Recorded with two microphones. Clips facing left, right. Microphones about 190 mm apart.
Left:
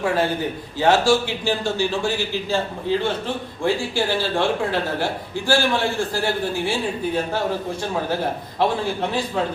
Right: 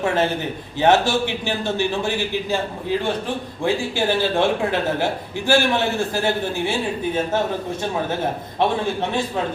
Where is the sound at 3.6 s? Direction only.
20° right (ahead or behind).